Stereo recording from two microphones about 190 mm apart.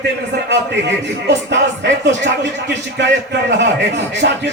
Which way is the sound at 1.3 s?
70° right (ahead or behind).